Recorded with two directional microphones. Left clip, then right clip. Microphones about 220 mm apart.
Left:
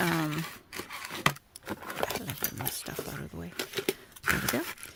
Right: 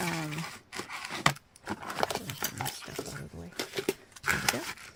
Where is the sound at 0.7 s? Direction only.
5° right (ahead or behind).